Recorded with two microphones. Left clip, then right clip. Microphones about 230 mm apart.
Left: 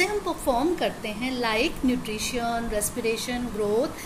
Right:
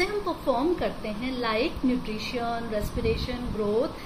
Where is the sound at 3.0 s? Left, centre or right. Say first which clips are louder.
Left 1 dB; left.